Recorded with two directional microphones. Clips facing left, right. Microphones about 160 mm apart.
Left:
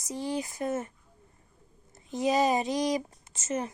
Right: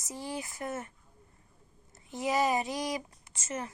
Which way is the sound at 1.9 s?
20° left (ahead or behind).